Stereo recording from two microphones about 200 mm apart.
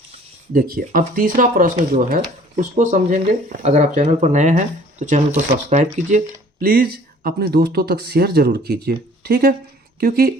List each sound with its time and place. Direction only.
0.5 s speech: 45° right (ahead or behind)